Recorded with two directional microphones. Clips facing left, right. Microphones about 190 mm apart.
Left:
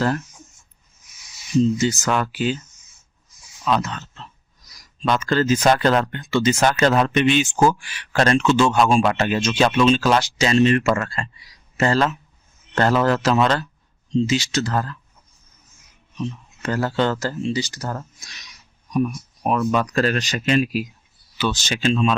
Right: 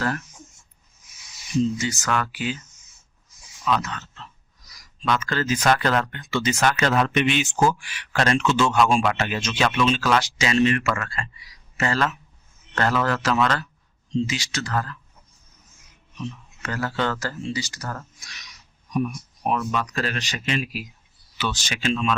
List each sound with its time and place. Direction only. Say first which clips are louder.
1.8 s speech: left 5 dB; 25° left (ahead or behind)
3.6 s speech: left 3 dB; 30° left (ahead or behind)
16.2 s speech: left 6 dB; 30° left (ahead or behind)
19.5 s speech: left 10 dB; 45° left (ahead or behind)
21.3 s speech: left 5 dB; 30° left (ahead or behind)